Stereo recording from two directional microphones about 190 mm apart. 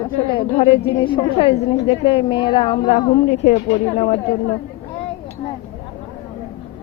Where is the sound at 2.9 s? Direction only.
40° left (ahead or behind).